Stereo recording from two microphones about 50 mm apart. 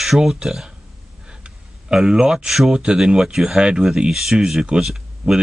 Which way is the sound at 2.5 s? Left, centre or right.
Centre.